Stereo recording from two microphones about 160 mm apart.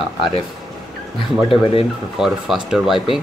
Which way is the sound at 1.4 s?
35° left (ahead or behind).